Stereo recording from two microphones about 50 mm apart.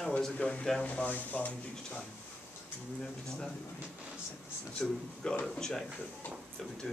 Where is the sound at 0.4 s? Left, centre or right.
Left.